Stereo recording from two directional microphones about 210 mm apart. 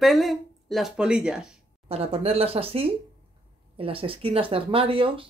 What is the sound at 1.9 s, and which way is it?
Speech, 30° right (ahead or behind).